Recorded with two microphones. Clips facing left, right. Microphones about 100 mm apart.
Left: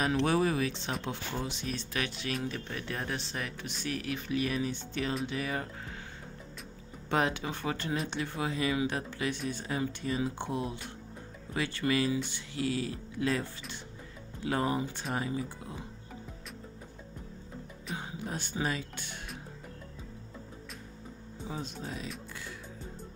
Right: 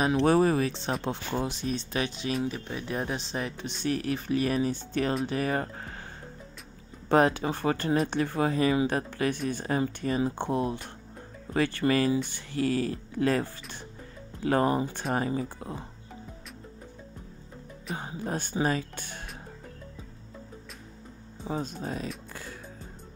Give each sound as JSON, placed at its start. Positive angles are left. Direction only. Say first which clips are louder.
{"t": 0.2, "sound": "speech", "louder": "right 8 dB", "side_deg": -40}
{"t": 7.1, "sound": "speech", "louder": "right 7 dB", "side_deg": -40}
{"t": 17.9, "sound": "speech", "louder": "right 5 dB", "side_deg": -40}
{"t": 21.5, "sound": "speech", "louder": "right 7 dB", "side_deg": -40}
{"t": 22.3, "sound": "music", "louder": "right 2 dB", "side_deg": -40}